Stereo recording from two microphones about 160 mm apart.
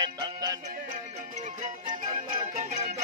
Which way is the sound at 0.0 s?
25° right (ahead or behind).